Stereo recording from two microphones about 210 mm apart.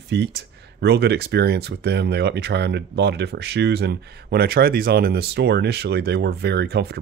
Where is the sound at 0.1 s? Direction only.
55° right (ahead or behind).